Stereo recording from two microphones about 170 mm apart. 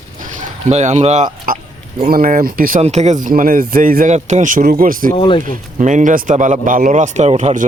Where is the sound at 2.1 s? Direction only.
55° right (ahead or behind).